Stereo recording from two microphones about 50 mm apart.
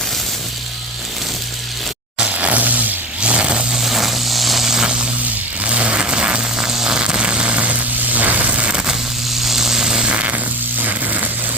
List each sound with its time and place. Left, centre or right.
2.2 s a sound: right
3.2 s vehicle: right
3.8 s vehicle: centre
5.6 s vehicle: right
9.4 s buzz: centre
10.8 s a sound: right